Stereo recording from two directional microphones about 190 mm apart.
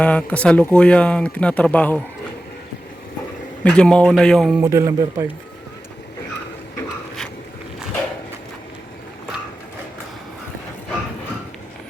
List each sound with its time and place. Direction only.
0.0 s speech: 5° left (ahead or behind)
3.6 s a man's voice: 5° left (ahead or behind)
4.6 s a man's voice: 15° right (ahead or behind)